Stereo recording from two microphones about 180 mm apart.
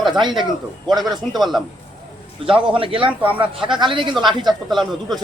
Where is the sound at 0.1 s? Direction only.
25° right (ahead or behind).